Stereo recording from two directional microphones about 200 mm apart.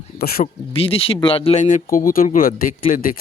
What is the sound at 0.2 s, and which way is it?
Speech, 50° left (ahead or behind).